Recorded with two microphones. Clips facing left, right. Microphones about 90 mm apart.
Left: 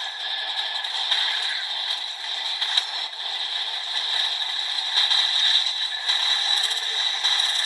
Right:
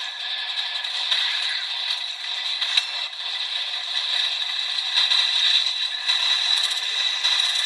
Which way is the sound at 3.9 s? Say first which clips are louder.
Left 1 dB; 40° left (ahead or behind).